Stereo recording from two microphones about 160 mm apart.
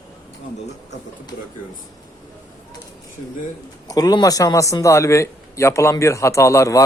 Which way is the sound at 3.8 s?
25° left (ahead or behind).